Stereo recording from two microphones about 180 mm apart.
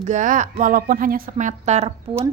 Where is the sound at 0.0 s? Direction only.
40° right (ahead or behind).